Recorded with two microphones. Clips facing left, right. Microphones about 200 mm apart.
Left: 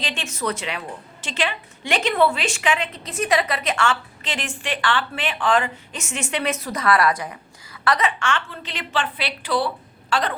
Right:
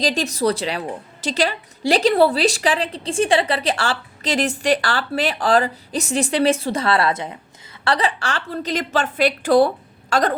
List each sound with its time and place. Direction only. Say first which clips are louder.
0.0 s a woman's voice: right 8 dB; 40° right (ahead or behind)